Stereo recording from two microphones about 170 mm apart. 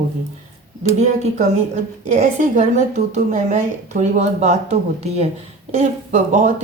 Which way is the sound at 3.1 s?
45° right (ahead or behind).